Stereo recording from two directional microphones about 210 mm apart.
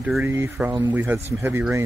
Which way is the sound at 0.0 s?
5° right (ahead or behind).